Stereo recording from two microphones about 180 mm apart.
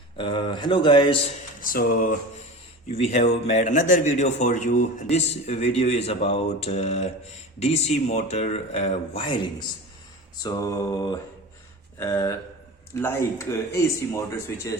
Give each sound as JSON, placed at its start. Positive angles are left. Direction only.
{"t": 0.2, "sound": "speech", "side_deg": 30}
{"t": 1.6, "sound": "a sound", "side_deg": 50}
{"t": 2.9, "sound": "a man's voice", "side_deg": 35}